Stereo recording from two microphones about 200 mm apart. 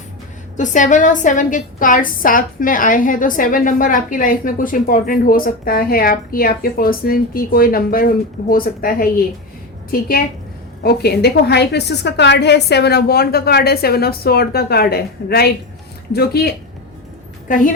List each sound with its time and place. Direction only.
0.5 s a woman's voice: 40° left (ahead or behind)